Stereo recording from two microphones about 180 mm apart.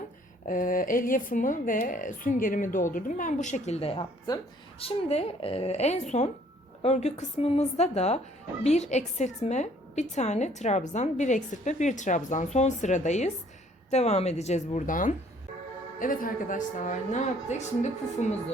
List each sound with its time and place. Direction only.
0.4 s a woman's voice: 50° left (ahead or behind)